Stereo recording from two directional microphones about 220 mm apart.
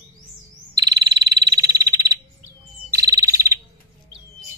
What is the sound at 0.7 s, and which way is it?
Frog, 20° right (ahead or behind).